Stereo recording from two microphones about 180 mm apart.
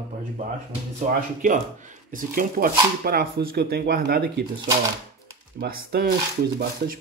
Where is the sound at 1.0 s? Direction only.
45° right (ahead or behind).